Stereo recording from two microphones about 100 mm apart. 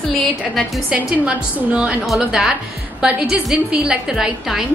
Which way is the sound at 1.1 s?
10° right (ahead or behind).